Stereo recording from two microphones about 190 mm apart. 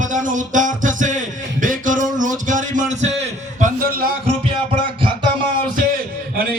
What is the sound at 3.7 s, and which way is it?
Speech, 50° right (ahead or behind).